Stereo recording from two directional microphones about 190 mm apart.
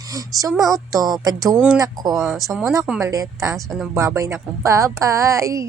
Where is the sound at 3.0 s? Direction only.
15° right (ahead or behind).